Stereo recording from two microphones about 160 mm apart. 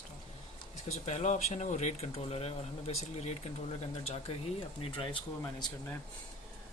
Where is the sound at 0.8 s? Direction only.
45° left (ahead or behind).